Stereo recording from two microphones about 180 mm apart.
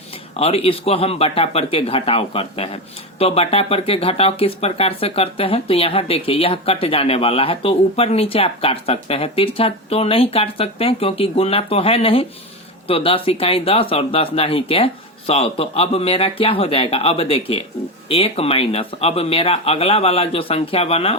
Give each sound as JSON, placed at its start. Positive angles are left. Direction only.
{"t": 0.1, "sound": "speech", "side_deg": 35}